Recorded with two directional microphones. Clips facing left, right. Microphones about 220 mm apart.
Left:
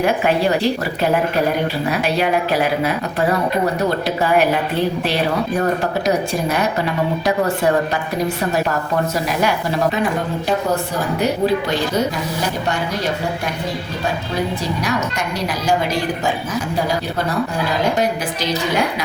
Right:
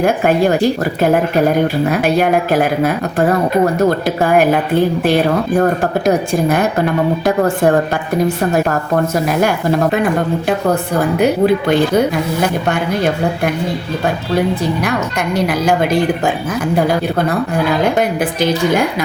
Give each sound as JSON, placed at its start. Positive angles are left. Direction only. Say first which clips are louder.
{"t": 0.0, "sound": "a woman's voice", "louder": "right 4 dB", "side_deg": -50}
{"t": 9.1, "sound": "a woman's voice", "louder": "right 4 dB", "side_deg": -50}
{"t": 11.2, "sound": "a woman's voice", "louder": "right 4 dB", "side_deg": -55}
{"t": 15.4, "sound": "a woman's voice", "louder": "right 3 dB", "side_deg": -55}
{"t": 17.9, "sound": "a woman's voice", "louder": "right 4 dB", "side_deg": -55}